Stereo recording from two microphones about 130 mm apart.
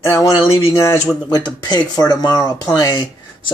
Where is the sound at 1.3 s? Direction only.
35° left (ahead or behind).